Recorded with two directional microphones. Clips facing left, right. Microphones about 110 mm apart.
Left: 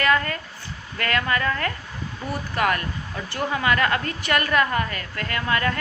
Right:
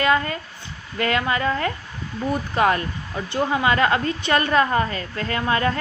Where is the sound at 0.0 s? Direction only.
20° right (ahead or behind).